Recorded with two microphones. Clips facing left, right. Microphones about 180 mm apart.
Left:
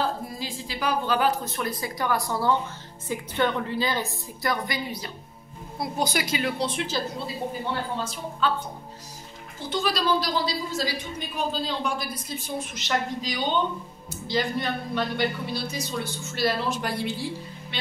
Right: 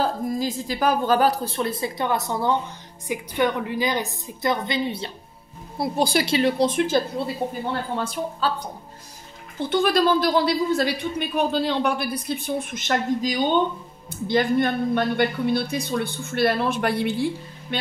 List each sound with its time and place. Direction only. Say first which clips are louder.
0.0 s a woman's voice: right 6 dB; 45° right (ahead or behind)
8.4 s a woman's voice: even; 35° right (ahead or behind)
9.6 s a woman's voice: right 7 dB; 60° right (ahead or behind)